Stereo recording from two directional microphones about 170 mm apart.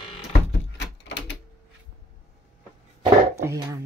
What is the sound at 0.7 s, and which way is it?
Door, 90° left.